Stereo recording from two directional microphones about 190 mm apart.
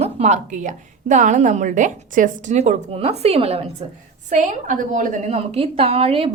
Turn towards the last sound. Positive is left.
turn(degrees=-30)  # may be behind; listen again after turning